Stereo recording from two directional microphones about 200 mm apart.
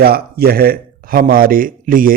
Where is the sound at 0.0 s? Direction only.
50° right (ahead or behind).